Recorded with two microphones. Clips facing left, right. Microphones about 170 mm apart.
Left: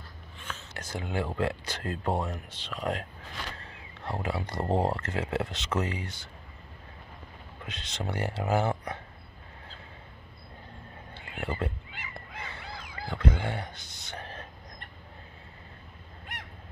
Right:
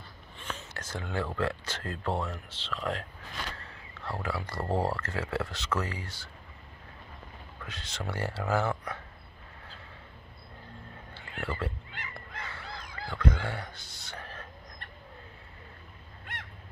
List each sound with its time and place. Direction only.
0.7 s speech: 15° left (ahead or behind)
7.6 s speech: 20° left (ahead or behind)
11.1 s neigh: 20° left (ahead or behind)
11.9 s goose: 5° left (ahead or behind)
12.7 s a sound: 10° left (ahead or behind)